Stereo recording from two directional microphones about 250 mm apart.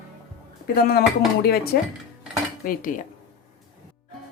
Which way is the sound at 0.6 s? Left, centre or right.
Left.